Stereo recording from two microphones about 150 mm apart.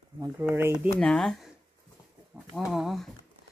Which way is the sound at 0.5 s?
15° right (ahead or behind).